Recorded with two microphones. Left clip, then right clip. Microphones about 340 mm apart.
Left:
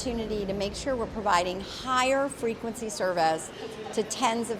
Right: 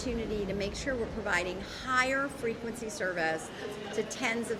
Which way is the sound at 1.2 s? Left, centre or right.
Left.